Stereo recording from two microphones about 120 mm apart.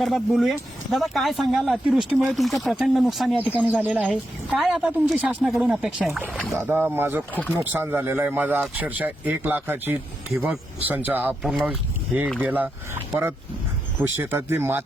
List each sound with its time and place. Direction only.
0.0 s speech: centre (ahead or behind)
6.6 s speech: 20° right (ahead or behind)